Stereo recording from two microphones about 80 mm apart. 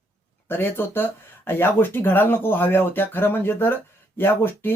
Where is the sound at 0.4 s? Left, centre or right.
Left.